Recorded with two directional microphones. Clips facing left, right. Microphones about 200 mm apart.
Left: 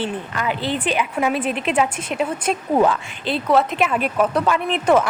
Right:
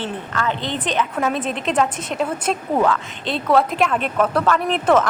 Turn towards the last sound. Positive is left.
turn(degrees=5)  # may be behind; listen again after turning